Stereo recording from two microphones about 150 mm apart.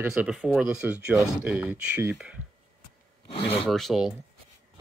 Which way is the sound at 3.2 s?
40° left (ahead or behind).